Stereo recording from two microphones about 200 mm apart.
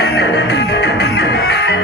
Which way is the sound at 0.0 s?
60° left (ahead or behind).